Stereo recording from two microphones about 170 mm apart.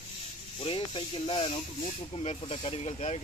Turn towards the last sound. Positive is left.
turn(degrees=40)  # may be behind; listen again after turning